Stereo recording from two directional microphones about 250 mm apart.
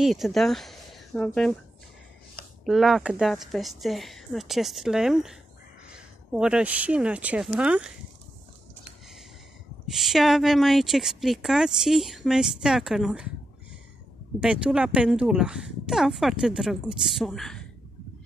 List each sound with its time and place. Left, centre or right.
0.0 s speech: centre
2.6 s speech: centre
9.8 s speech: centre
14.4 s speech: centre